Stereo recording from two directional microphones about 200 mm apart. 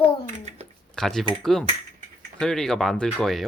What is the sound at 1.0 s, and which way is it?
Speech, centre (ahead or behind).